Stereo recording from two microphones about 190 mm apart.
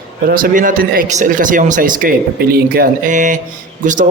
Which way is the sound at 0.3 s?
45° right (ahead or behind).